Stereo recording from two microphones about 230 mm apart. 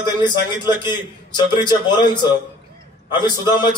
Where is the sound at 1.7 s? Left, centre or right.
Centre.